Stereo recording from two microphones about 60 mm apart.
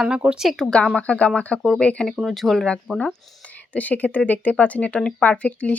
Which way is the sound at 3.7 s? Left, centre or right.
Left.